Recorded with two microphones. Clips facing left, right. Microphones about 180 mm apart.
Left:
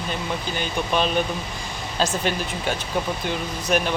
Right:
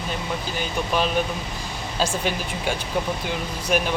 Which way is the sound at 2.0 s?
10° right (ahead or behind).